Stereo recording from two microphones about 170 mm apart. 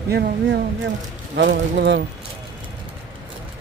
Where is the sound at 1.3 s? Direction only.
85° right.